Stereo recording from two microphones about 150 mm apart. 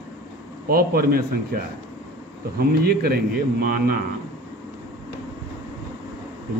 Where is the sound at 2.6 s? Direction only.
90° right.